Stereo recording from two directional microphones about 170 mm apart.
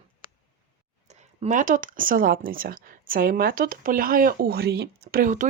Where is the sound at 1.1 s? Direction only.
45° right (ahead or behind).